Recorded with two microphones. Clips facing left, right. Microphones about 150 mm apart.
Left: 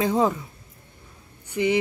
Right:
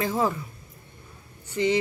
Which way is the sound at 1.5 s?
10° left (ahead or behind).